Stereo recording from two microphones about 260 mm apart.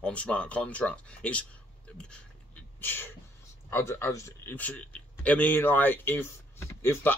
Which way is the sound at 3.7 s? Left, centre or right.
Centre.